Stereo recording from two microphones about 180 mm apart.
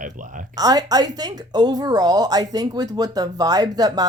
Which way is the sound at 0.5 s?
20° right (ahead or behind).